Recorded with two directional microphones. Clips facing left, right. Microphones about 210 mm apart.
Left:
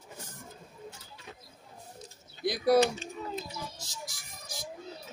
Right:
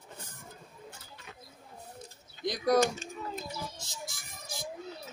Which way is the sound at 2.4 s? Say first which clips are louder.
Left 2 dB; 5° left (ahead or behind).